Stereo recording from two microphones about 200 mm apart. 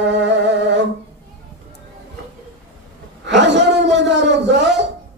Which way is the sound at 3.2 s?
60° right (ahead or behind).